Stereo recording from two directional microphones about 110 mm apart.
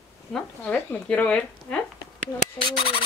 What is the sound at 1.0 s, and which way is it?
Speech, 10° left (ahead or behind).